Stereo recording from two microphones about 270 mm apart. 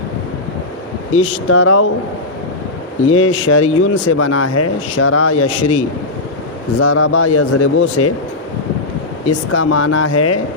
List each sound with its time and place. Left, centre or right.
1.1 s a man's voice: left
3.1 s a man's voice: left
4.2 s a man's voice: left
9.5 s speech: left